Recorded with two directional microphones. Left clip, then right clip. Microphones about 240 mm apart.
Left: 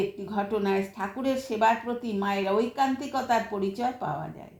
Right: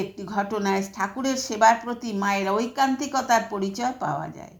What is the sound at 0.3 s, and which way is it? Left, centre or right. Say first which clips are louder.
A woman's voice: right 5 dB; right.